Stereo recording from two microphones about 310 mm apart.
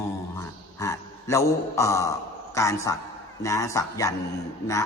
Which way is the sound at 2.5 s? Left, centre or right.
Centre.